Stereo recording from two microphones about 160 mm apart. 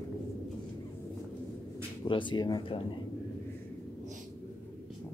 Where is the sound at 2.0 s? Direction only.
30° left (ahead or behind).